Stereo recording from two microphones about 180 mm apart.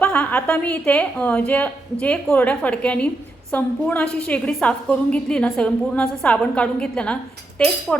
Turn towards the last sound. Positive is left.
turn(degrees=5)  # may be behind; listen again after turning